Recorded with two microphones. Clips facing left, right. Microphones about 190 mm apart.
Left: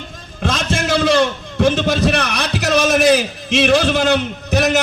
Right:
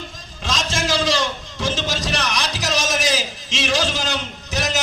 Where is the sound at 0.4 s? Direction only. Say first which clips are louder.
Left 5 dB; 60° left (ahead or behind).